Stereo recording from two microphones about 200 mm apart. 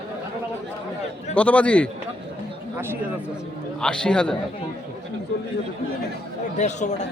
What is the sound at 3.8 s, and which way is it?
Speech, 5° left (ahead or behind).